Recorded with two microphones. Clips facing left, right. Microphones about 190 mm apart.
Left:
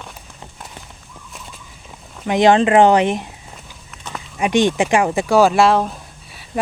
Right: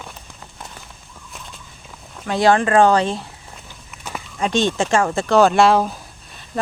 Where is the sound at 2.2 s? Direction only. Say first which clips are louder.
Left 3 dB; 20° left (ahead or behind).